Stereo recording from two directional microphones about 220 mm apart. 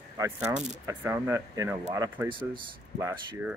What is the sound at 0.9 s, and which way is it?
Speech, 10° right (ahead or behind).